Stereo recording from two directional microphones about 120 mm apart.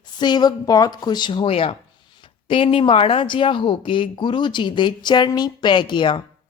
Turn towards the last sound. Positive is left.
turn(degrees=40)  # may be behind; listen again after turning